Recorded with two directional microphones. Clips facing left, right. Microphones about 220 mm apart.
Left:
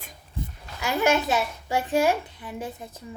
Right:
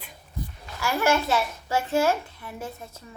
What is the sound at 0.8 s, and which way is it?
A child's voice, 20° left (ahead or behind).